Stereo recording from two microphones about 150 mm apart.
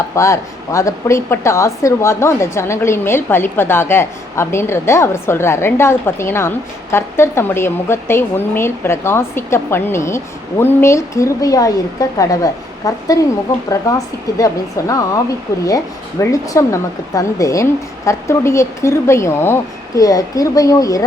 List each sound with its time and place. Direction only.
0.2 s a woman's voice: 20° left (ahead or behind)
14.3 s speech: 20° left (ahead or behind)
16.3 s speech: 20° left (ahead or behind)